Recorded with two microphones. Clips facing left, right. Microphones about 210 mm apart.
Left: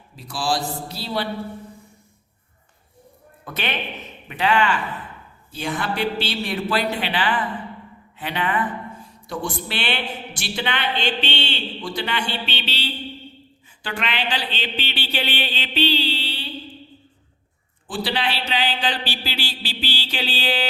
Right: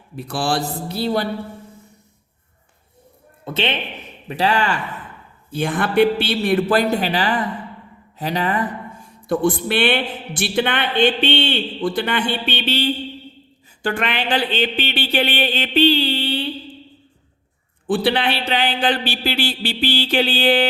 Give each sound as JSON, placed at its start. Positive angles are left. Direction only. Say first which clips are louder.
{"t": 0.2, "sound": "a man's voice", "louder": "right 3 dB", "side_deg": -60}
{"t": 3.4, "sound": "speech", "louder": "right 6 dB", "side_deg": -25}
{"t": 4.3, "sound": "speech", "louder": "right 1 dB", "side_deg": -35}
{"t": 5.5, "sound": "speech", "louder": "right 5 dB", "side_deg": -55}
{"t": 9.2, "sound": "speech", "louder": "right 10 dB", "side_deg": -55}
{"t": 17.8, "sound": "a man's voice", "louder": "right 7 dB", "side_deg": -60}